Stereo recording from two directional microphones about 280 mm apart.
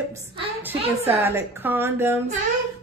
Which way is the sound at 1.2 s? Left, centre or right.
Centre.